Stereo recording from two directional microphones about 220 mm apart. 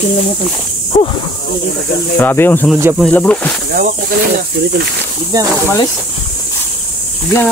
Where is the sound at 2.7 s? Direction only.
10° right (ahead or behind).